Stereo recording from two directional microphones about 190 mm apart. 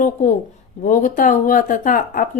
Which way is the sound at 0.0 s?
45° left (ahead or behind).